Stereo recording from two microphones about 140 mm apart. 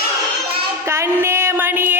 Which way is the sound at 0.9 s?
20° right (ahead or behind).